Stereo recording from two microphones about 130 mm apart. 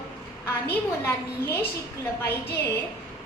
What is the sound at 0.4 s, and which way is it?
A woman's voice, 15° left (ahead or behind).